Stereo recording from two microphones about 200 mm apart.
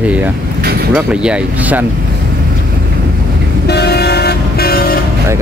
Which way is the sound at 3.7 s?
55° left (ahead or behind).